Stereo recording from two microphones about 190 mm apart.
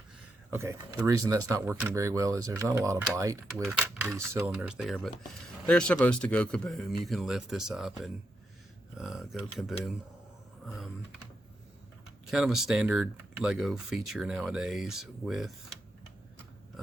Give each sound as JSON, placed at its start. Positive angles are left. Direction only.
{"t": 0.5, "sound": "speech", "side_deg": -15}
{"t": 3.7, "sound": "speech", "side_deg": -5}
{"t": 4.1, "sound": "speech", "side_deg": -15}
{"t": 4.5, "sound": "speech", "side_deg": -5}
{"t": 12.3, "sound": "speech", "side_deg": 0}